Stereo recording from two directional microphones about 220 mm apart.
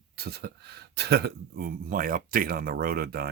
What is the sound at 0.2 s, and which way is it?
Speech, 45° right (ahead or behind).